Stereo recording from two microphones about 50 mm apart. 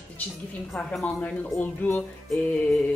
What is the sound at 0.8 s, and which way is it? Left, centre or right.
Speech, left.